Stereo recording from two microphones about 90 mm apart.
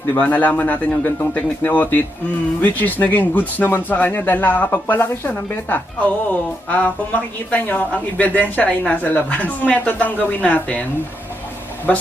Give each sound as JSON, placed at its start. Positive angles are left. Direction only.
{"t": 0.2, "sound": "speech", "side_deg": 20}
{"t": 11.9, "sound": "speech", "side_deg": 15}